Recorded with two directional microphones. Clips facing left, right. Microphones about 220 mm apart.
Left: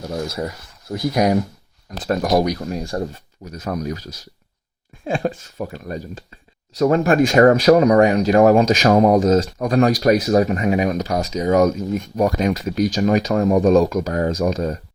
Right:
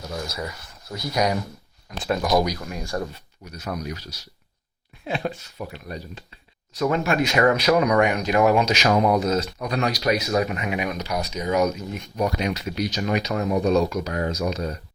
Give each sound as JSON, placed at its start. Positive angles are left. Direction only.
{"t": 0.3, "sound": "speech", "side_deg": 50}
{"t": 1.9, "sound": "speech", "side_deg": 40}
{"t": 3.1, "sound": "speech", "side_deg": 45}
{"t": 5.0, "sound": "speech", "side_deg": 45}
{"t": 10.2, "sound": "speech", "side_deg": 35}